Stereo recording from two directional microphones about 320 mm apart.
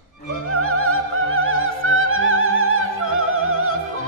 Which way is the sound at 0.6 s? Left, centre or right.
Right.